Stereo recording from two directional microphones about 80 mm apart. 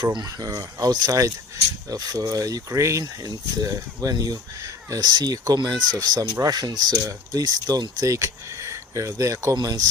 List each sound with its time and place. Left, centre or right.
0.0 s speech: right
0.3 s speech: right
3.0 s speech: right
8.0 s speech: right
9.6 s speech: right